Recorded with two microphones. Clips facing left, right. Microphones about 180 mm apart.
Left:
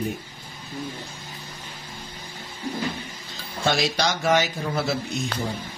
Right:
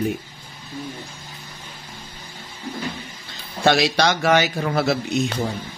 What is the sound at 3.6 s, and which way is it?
Speech, 70° right (ahead or behind).